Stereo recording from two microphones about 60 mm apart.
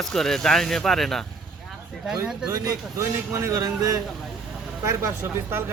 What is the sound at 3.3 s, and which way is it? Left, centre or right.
Speech, right.